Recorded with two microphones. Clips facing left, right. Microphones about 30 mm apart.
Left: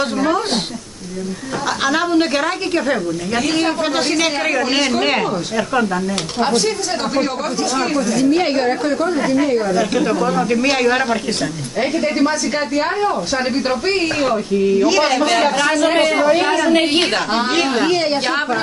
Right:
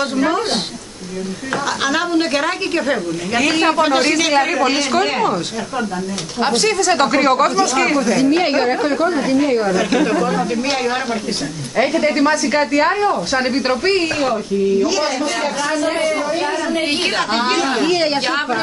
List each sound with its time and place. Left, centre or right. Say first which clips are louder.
1.8 s a woman's voice: left 3 dB; centre
6.6 s a woman's voice: right 5 dB; right
8.2 s speech: left 3 dB; centre
10.5 s speech: left 3 dB; left
12.2 s a woman's voice: right 2 dB; right
14.0 s a woman's voice: left 1 dB; centre
14.9 s speech: left 4 dB; left
15.2 s a woman's voice: left 5 dB; left
15.6 s speech: left 3 dB; left
15.9 s speech: left 4 dB; left
17.9 s speech: even; centre
18.2 s a woman's voice: even; centre